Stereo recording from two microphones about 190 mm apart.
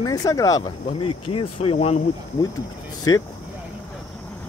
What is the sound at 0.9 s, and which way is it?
Speech, 30° left (ahead or behind).